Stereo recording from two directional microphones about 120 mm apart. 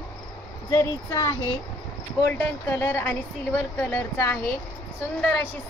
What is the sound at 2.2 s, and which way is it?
Speech, 20° left (ahead or behind).